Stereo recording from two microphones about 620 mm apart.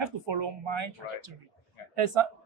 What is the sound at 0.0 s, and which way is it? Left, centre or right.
Speech, right.